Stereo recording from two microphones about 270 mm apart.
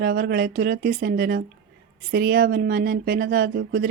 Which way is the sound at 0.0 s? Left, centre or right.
Right.